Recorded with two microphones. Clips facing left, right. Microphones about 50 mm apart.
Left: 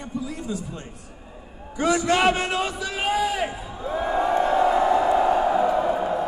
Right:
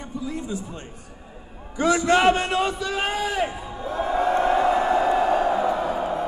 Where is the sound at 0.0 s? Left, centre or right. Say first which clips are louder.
Even; right.